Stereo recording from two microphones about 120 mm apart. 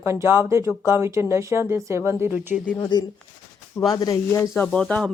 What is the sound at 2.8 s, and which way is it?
Speech, 35° left (ahead or behind).